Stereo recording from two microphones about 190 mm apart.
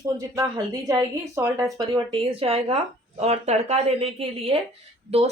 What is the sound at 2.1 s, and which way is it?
A woman's voice, 30° right (ahead or behind).